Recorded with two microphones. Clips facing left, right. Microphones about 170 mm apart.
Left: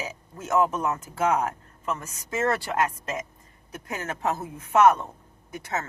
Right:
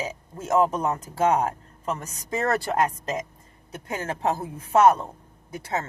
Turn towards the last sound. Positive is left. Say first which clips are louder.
# right 2 dB
turn(degrees=-30)  # may be behind; listen again after turning